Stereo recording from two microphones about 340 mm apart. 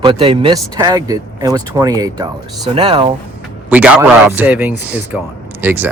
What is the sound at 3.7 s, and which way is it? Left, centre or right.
Speech, centre.